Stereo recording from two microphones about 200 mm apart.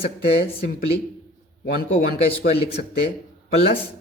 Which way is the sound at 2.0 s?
45° left (ahead or behind).